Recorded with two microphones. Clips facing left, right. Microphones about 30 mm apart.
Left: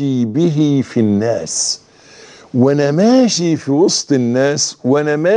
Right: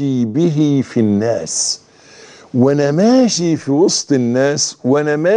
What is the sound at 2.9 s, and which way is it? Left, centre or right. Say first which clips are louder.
Speech: even; centre.